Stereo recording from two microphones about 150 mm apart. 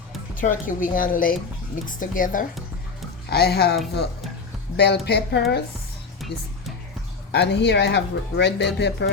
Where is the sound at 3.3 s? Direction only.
90° left.